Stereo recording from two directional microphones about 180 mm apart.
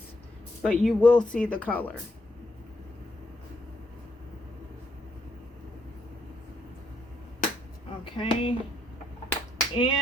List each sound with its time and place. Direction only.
0.6 s speech: centre (ahead or behind)
8.0 s a sound: 30° left (ahead or behind)
9.6 s clapping: 25° left (ahead or behind)